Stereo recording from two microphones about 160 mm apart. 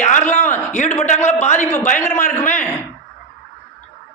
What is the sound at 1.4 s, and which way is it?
Speech, 50° left (ahead or behind).